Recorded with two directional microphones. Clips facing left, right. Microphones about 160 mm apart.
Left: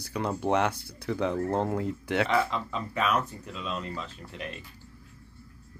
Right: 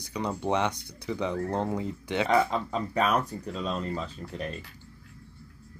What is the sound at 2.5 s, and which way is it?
Speech, 40° right (ahead or behind).